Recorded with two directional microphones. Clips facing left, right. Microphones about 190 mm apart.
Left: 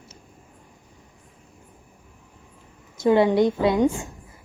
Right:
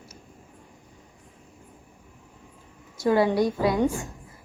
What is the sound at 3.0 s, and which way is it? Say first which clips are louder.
Speech: left 4 dB; 20° left (ahead or behind).